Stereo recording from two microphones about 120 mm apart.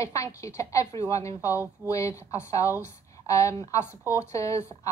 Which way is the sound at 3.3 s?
25° left (ahead or behind).